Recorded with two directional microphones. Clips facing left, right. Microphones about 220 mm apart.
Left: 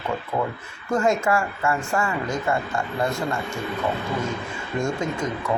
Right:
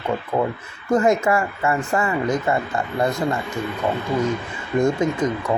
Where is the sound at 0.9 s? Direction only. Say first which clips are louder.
Right 3 dB; 20° right (ahead or behind).